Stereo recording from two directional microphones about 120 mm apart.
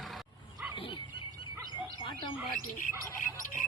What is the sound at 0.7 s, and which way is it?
Dog, 45° left (ahead or behind).